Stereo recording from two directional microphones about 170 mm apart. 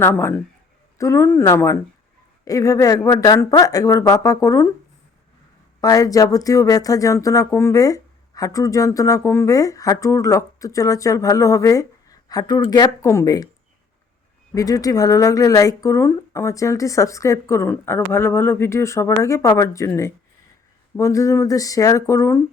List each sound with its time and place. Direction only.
0.0 s speech: 15° left (ahead or behind)
5.8 s speech: 20° left (ahead or behind)
14.5 s speech: 20° left (ahead or behind)